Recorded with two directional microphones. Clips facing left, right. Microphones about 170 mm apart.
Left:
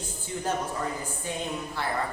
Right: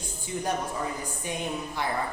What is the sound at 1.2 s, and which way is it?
Speech, 15° right (ahead or behind).